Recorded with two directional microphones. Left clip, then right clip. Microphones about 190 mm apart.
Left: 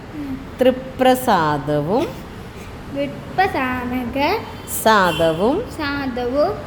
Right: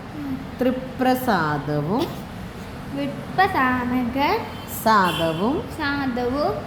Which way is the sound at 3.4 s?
Centre (ahead or behind).